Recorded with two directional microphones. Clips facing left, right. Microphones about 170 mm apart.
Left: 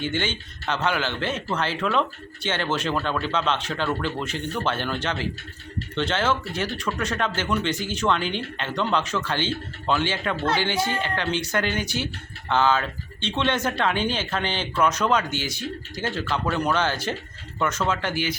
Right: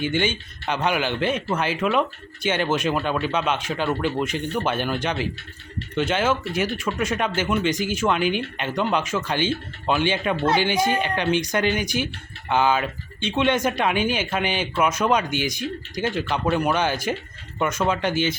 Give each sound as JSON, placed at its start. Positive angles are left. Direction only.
{"t": 0.0, "sound": "speech", "side_deg": -15}